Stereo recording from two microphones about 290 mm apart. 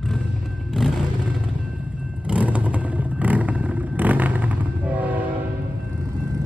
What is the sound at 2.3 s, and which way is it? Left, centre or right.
Vehicle, centre.